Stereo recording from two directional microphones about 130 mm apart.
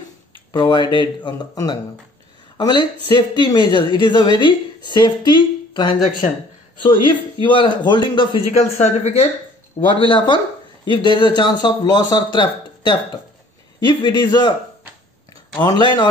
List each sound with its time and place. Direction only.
0.5 s a woman's voice: 35° left (ahead or behind)
8.5 s speech: 60° left (ahead or behind)
9.8 s a woman's voice: 40° left (ahead or behind)
15.6 s a woman's voice: 35° left (ahead or behind)